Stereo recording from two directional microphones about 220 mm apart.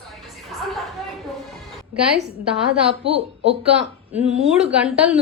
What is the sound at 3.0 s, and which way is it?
Speech, 25° right (ahead or behind).